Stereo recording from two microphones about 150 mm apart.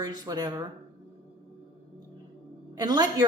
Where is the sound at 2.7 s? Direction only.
25° right (ahead or behind).